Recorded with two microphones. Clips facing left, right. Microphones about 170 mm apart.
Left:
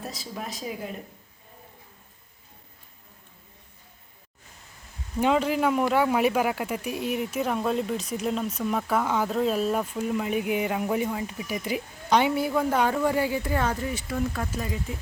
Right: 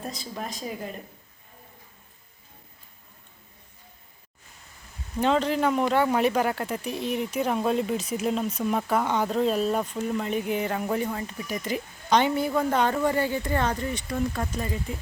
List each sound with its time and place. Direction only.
0.0 s speech: 5° left (ahead or behind)
5.2 s speech: 10° left (ahead or behind)